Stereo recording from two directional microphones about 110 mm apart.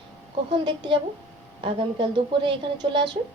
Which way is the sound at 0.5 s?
45° right (ahead or behind).